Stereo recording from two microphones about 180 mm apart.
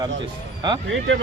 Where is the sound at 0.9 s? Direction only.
90° right.